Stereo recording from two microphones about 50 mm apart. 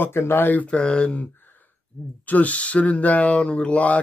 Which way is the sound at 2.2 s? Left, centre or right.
Left.